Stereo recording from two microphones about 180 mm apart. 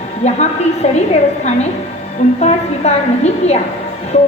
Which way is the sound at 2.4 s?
40° left (ahead or behind).